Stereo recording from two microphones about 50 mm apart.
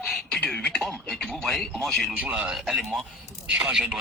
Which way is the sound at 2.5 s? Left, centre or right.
Centre.